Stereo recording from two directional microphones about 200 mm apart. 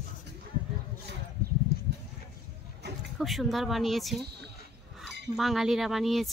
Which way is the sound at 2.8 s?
55° right (ahead or behind).